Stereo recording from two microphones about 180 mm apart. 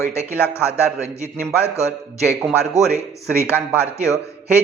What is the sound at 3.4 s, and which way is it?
A man's voice, 15° left (ahead or behind).